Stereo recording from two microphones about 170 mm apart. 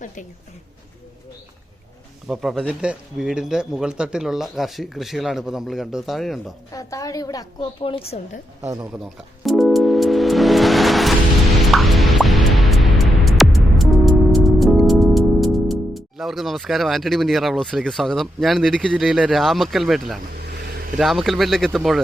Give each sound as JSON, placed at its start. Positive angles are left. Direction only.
{"t": 2.2, "sound": "speech", "side_deg": 0}
{"t": 6.7, "sound": "a woman's voice", "side_deg": 20}
{"t": 8.6, "sound": "speech", "side_deg": -20}
{"t": 8.9, "sound": "music", "side_deg": 0}
{"t": 20.9, "sound": "speech", "side_deg": 0}